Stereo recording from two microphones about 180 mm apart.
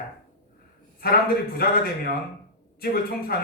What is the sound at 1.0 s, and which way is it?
Speech, 55° left (ahead or behind).